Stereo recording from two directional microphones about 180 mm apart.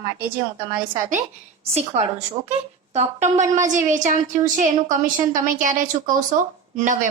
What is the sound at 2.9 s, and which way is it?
A woman's voice, 40° right (ahead or behind).